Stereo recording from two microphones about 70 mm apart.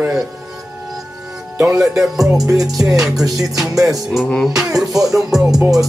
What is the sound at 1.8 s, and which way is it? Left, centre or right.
Music, centre.